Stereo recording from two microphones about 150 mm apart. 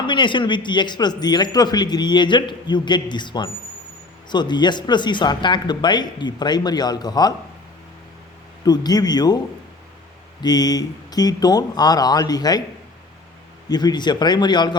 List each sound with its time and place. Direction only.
0.1 s a man's voice: 30° left (ahead or behind)
8.6 s a man's voice: 25° left (ahead or behind)
10.4 s a man's voice: 25° left (ahead or behind)
13.7 s a man's voice: 25° left (ahead or behind)